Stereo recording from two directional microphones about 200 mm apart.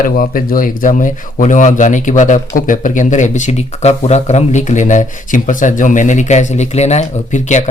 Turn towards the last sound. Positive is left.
turn(degrees=35)  # may be behind; listen again after turning